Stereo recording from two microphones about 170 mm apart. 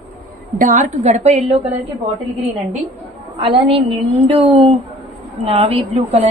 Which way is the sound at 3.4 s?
30° right (ahead or behind).